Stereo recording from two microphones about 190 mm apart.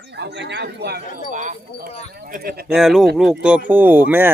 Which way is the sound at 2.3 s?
50° right (ahead or behind).